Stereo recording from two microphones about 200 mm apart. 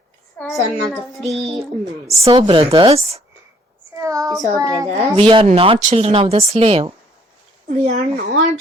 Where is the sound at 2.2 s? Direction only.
25° right (ahead or behind).